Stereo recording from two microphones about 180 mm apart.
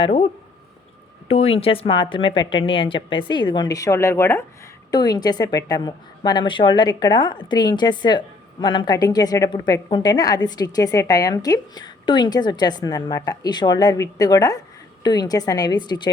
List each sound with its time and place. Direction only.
0.0 s speech: 35° left (ahead or behind)
1.3 s speech: 35° left (ahead or behind)